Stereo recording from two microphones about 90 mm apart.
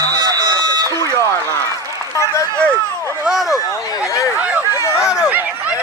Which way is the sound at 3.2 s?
5° right (ahead or behind).